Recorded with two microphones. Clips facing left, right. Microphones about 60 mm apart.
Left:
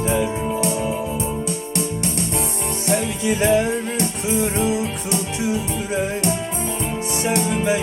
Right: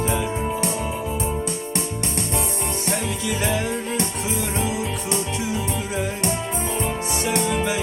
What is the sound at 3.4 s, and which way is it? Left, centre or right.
Music, left.